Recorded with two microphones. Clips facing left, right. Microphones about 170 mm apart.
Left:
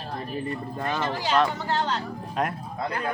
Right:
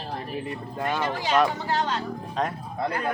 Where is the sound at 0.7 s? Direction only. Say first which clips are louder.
Right 3 dB; 5° right (ahead or behind).